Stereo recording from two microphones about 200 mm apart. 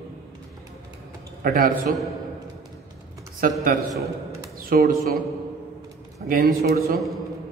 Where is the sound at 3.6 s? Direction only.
45° right (ahead or behind).